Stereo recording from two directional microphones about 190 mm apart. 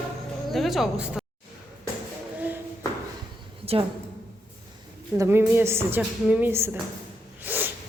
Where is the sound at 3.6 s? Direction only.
30° right (ahead or behind).